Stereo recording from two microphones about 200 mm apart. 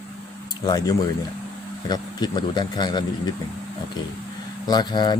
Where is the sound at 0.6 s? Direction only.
20° left (ahead or behind).